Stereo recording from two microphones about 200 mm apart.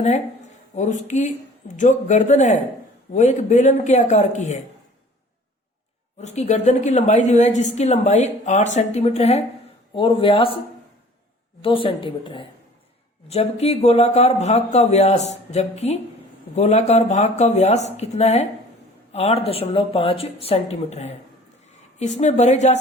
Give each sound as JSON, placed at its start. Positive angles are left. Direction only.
{"t": 0.8, "sound": "a woman's voice", "side_deg": 35}
{"t": 6.1, "sound": "a woman's voice", "side_deg": 35}
{"t": 11.6, "sound": "a woman's voice", "side_deg": 25}